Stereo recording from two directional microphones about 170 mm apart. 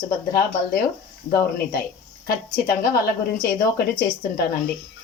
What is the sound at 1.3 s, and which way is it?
Speech, 65° left (ahead or behind).